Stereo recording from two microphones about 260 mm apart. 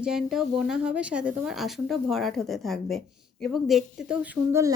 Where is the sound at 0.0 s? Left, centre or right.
Centre.